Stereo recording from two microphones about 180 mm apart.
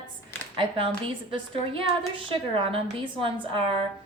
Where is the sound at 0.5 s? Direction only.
30° right (ahead or behind).